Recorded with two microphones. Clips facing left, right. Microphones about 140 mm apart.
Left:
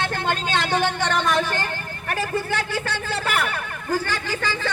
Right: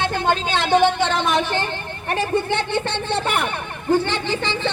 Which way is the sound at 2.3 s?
25° right (ahead or behind).